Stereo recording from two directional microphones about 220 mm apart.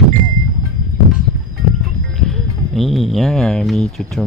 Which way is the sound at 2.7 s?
Centre (ahead or behind).